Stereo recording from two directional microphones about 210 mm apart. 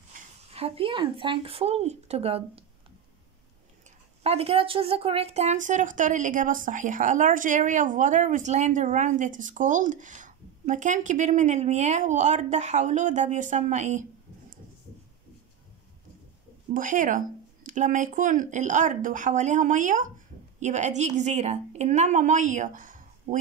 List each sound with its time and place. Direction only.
0.5 s speech: 30° right (ahead or behind)
4.2 s a woman's voice: 30° right (ahead or behind)
16.7 s a woman's voice: 40° right (ahead or behind)